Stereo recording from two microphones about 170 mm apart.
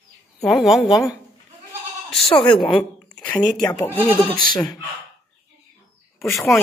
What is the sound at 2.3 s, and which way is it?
Speech, 30° left (ahead or behind).